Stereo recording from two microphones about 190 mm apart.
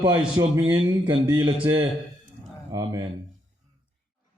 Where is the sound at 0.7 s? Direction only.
20° right (ahead or behind).